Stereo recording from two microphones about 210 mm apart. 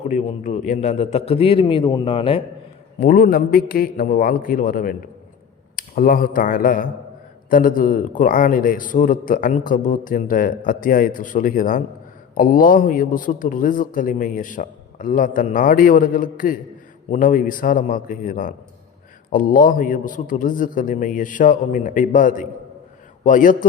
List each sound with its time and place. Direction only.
0.1 s a man's voice: 35° left (ahead or behind)
3.0 s a man's voice: 45° left (ahead or behind)